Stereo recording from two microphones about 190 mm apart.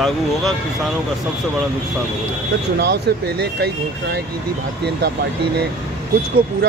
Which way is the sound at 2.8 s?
60° right (ahead or behind).